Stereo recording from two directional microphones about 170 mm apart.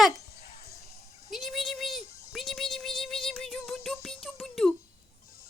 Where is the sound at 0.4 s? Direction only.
60° left (ahead or behind).